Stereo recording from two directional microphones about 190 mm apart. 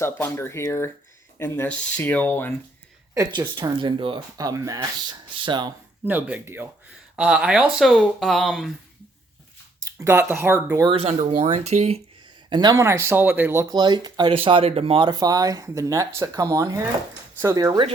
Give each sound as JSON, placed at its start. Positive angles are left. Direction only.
{"t": 0.0, "sound": "speech", "side_deg": 15}
{"t": 3.5, "sound": "speech", "side_deg": -25}
{"t": 6.1, "sound": "speech", "side_deg": -10}
{"t": 9.8, "sound": "speech", "side_deg": -15}
{"t": 10.8, "sound": "speech", "side_deg": -30}
{"t": 12.5, "sound": "speech", "side_deg": -20}